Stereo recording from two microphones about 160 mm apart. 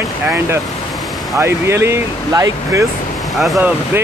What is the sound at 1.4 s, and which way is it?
Speech, 15° right (ahead or behind).